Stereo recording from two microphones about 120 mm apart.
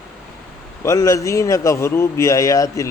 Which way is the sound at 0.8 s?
25° left (ahead or behind).